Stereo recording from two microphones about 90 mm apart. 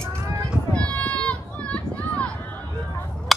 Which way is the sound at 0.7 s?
15° left (ahead or behind).